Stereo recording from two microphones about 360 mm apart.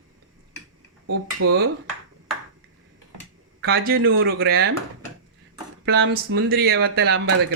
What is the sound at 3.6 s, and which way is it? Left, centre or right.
Speech, right.